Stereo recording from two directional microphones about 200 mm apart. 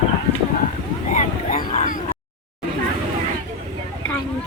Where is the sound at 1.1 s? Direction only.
40° left (ahead or behind).